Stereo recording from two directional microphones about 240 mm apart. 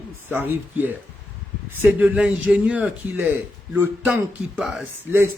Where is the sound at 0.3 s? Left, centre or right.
Centre.